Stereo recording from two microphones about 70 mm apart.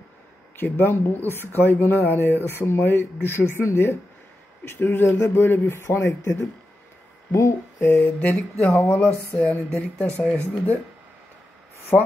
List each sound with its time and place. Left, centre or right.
0.7 s speech: left
8.0 s speech: left
11.9 s speech: left